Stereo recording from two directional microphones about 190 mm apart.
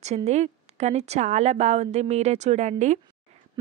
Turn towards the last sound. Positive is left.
turn(degrees=-35)  # may be behind; listen again after turning